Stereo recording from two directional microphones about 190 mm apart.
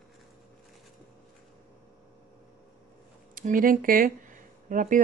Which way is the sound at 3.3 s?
45° right (ahead or behind).